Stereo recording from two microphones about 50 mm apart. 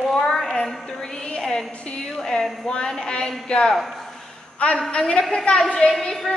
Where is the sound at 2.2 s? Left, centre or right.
Centre.